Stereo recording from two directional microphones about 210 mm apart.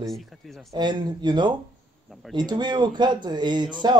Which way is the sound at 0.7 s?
20° right (ahead or behind).